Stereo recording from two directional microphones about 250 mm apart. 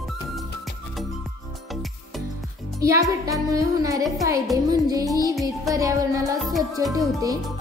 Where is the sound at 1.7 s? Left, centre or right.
Centre.